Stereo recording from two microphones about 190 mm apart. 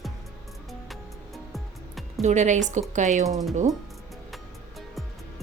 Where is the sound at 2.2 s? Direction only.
40° right (ahead or behind).